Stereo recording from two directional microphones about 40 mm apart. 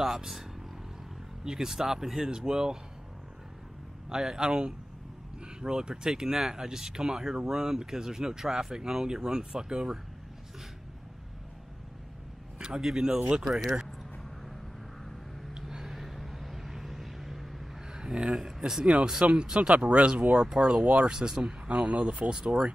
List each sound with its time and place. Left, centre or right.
0.0 s speech: centre
4.1 s speech: centre
12.5 s a sound: right
12.8 s speech: centre
15.6 s vehicle: centre
17.9 s speech: centre
20.4 s speech: centre
21.6 s speech: right